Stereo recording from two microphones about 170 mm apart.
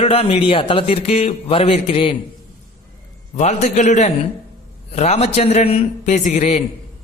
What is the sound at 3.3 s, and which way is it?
A man's voice, 45° left (ahead or behind).